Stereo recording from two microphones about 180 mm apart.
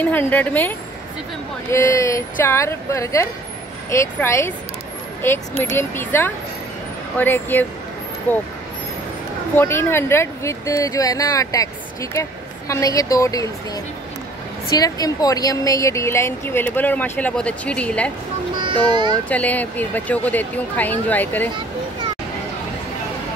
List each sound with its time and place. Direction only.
0.0 s speech: 10° left (ahead or behind)
9.6 s speech: 10° left (ahead or behind)
14.7 s speech: 20° left (ahead or behind)
18.6 s a child's voice: 25° right (ahead or behind)
19.2 s speech: 10° left (ahead or behind)